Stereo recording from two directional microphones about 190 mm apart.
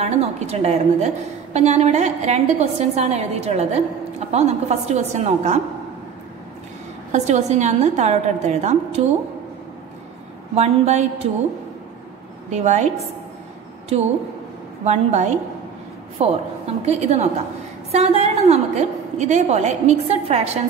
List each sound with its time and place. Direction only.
0.0 s a woman's voice: 35° right (ahead or behind)
7.1 s a woman's voice: 35° right (ahead or behind)
10.5 s a woman's voice: 35° right (ahead or behind)
12.4 s a woman's voice: 40° right (ahead or behind)